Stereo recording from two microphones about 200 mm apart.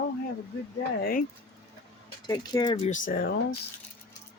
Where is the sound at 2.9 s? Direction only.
45° left (ahead or behind).